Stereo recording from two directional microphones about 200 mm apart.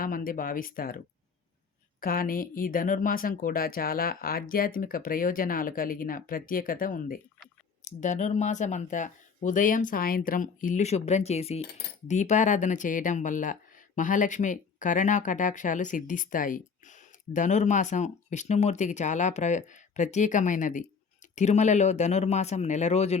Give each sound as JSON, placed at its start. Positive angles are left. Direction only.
{"t": 0.0, "sound": "speech", "side_deg": 45}
{"t": 2.0, "sound": "speech", "side_deg": 45}